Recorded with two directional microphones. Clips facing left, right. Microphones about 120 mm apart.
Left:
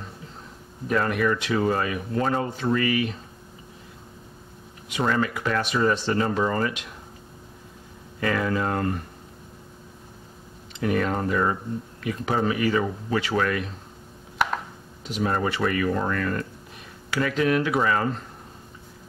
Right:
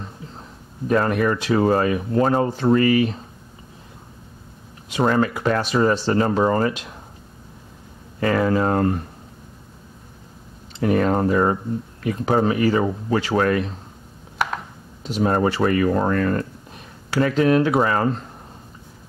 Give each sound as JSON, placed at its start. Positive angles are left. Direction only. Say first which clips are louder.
{"t": 0.8, "sound": "speech", "louder": "right 4 dB", "side_deg": -35}
{"t": 4.8, "sound": "speech", "louder": "right 5 dB", "side_deg": -35}
{"t": 8.2, "sound": "speech", "louder": "right 6 dB", "side_deg": -35}
{"t": 10.8, "sound": "speech", "louder": "right 6 dB", "side_deg": -35}
{"t": 15.0, "sound": "speech", "louder": "right 6 dB", "side_deg": -35}